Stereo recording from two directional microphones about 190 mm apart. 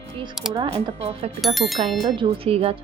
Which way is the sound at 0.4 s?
Centre (ahead or behind).